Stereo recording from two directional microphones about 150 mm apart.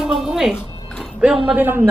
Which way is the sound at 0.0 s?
5° right (ahead or behind).